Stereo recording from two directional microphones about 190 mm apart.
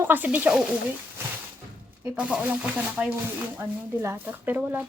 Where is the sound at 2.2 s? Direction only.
5° right (ahead or behind).